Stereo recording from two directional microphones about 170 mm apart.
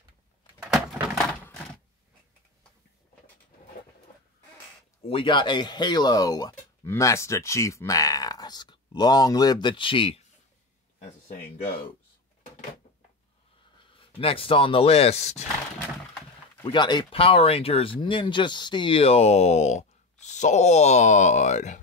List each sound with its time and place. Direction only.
5.0 s speech: 30° left (ahead or behind)
13.9 s speech: 35° left (ahead or behind)
16.6 s speech: 25° left (ahead or behind); by 21.7 s 45° left (ahead or behind)